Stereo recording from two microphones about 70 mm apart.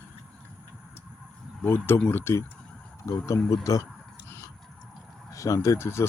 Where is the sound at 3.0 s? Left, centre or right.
Left.